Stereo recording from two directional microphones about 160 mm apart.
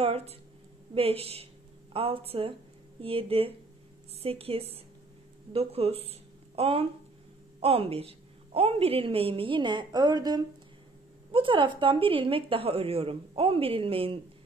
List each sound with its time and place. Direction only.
0.0 s a woman's voice: 40° right (ahead or behind)